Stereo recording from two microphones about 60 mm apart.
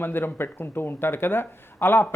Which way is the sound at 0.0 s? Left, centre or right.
Left.